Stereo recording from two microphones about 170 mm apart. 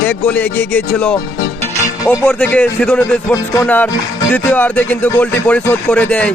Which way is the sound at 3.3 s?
20° left (ahead or behind).